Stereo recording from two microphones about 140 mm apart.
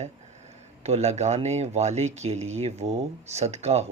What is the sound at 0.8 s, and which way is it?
Speech, 50° right (ahead or behind).